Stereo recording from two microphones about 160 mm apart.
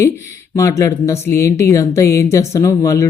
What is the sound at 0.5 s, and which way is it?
Speech, 20° left (ahead or behind).